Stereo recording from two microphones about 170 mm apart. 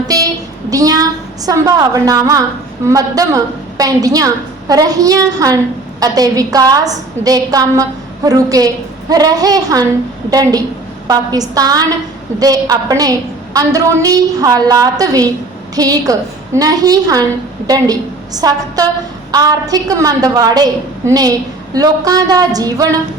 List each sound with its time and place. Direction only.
0.7 s a woman's voice: 20° right (ahead or behind)
18.3 s a woman's voice: 20° right (ahead or behind)